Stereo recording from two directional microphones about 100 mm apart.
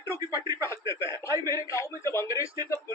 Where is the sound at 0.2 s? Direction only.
40° right (ahead or behind).